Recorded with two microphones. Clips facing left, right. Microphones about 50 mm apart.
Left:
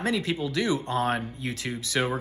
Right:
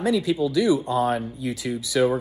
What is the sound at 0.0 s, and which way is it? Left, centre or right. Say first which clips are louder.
Speech: right 6 dB; left.